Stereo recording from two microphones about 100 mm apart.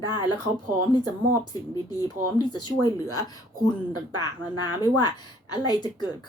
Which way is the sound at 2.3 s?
45° left (ahead or behind).